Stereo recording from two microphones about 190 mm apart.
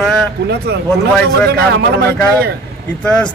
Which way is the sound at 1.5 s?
60° right (ahead or behind).